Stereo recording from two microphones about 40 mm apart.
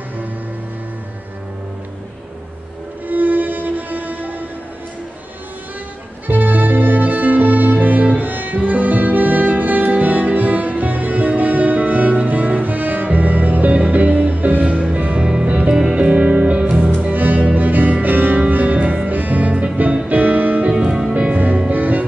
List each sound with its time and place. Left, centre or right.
3.1 s music: right
6.2 s music: right
15.1 s music: centre
16.0 s music: right
17.1 s music: right
20.1 s music: right
20.8 s music: centre
21.3 s music: right